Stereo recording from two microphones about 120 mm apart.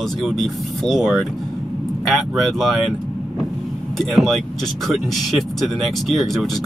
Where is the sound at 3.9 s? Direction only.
Centre (ahead or behind).